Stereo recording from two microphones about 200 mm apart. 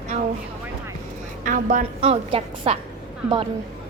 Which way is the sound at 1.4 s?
40° right (ahead or behind).